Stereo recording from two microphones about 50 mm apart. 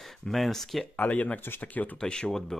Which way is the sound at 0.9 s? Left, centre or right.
Left.